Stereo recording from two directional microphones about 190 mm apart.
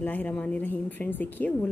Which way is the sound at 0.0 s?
10° left (ahead or behind).